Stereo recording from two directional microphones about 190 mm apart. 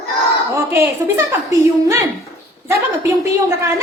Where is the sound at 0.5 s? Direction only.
15° right (ahead or behind).